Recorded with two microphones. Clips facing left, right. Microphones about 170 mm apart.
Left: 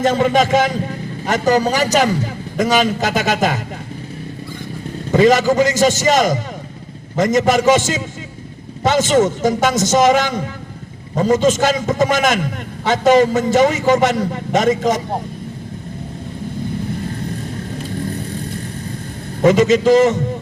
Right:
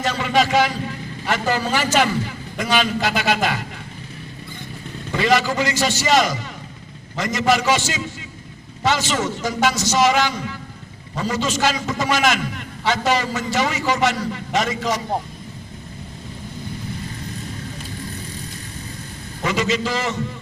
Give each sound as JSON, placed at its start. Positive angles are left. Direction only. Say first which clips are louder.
{"t": 0.0, "sound": "a man's voice", "louder": "left 6 dB", "side_deg": 50}
{"t": 5.1, "sound": "a man's voice", "louder": "left 7 dB", "side_deg": 45}
{"t": 19.4, "sound": "a man's voice", "louder": "left 10 dB", "side_deg": 45}